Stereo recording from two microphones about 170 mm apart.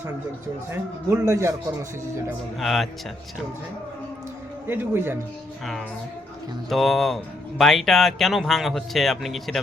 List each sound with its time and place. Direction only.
0.7 s a man's voice: 15° right (ahead or behind)
2.6 s speech: centre (ahead or behind)
4.7 s a man's voice: 10° right (ahead or behind)
6.7 s speech: centre (ahead or behind)